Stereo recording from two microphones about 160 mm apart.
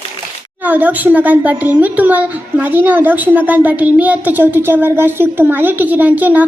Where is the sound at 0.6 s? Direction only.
10° right (ahead or behind).